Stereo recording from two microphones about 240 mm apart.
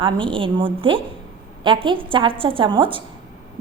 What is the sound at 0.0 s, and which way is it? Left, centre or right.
A woman's voice, right.